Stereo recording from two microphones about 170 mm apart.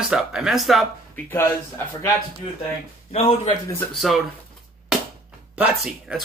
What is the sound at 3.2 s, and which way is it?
Speech, 25° left (ahead or behind).